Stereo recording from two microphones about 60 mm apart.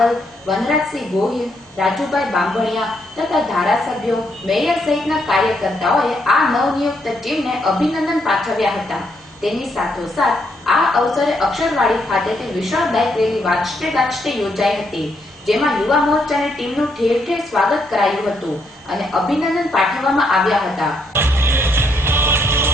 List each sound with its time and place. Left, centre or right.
0.0 s a woman's voice: centre
21.1 s music: right